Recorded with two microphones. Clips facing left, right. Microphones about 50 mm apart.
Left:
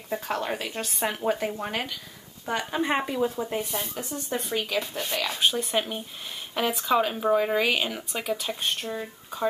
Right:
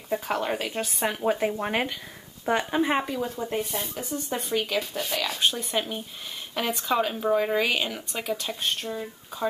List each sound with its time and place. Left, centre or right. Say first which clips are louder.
0.1 s speech: right 2 dB; centre
1.6 s speech: right 4 dB; right
2.7 s speech: left 1 dB; centre
3.0 s speech: left 2 dB; centre
8.8 s speech: even; centre